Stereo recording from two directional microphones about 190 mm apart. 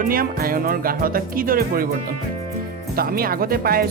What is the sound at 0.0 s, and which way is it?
Speech, 50° right (ahead or behind).